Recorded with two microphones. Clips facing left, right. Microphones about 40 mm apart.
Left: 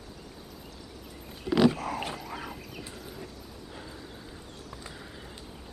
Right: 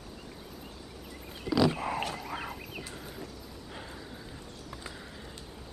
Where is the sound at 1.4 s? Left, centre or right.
Left.